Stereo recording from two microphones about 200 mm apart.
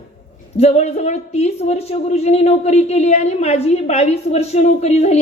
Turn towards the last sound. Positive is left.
turn(degrees=35)  # may be behind; listen again after turning